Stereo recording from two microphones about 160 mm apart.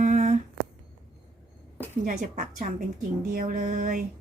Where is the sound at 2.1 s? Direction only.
55° right (ahead or behind).